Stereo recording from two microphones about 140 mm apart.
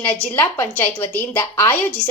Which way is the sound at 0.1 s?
10° left (ahead or behind).